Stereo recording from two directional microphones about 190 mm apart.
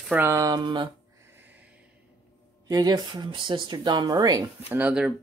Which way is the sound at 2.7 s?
20° right (ahead or behind).